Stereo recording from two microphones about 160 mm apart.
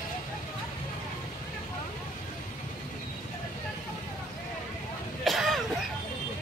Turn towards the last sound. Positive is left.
turn(degrees=0)  # may be behind; listen again after turning